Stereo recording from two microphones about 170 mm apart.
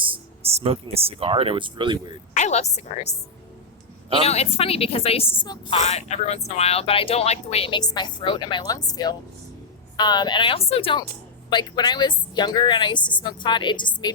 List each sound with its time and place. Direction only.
0.0 s speech: 35° right (ahead or behind)
2.3 s a woman's voice: 40° left (ahead or behind)
4.2 s a woman's voice: 35° left (ahead or behind)
5.9 s a woman's voice: 40° left (ahead or behind)